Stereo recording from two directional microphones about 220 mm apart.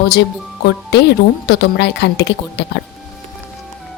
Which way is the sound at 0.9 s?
50° left (ahead or behind).